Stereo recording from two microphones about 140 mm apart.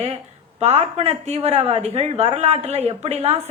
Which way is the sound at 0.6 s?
50° right (ahead or behind).